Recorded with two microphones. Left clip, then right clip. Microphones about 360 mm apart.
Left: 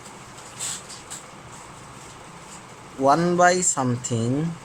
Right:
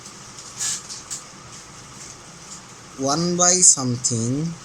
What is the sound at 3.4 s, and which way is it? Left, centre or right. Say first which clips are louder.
Speech: right 2 dB; left.